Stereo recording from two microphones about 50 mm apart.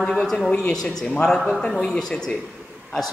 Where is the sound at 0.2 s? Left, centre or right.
Centre.